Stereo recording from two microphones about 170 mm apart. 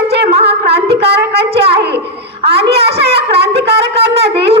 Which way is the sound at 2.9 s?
75° right (ahead or behind).